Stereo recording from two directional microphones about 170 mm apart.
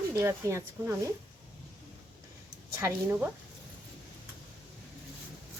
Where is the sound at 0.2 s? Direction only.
15° right (ahead or behind).